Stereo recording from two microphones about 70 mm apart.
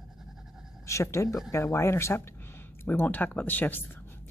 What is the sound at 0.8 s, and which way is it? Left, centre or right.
Speech, left.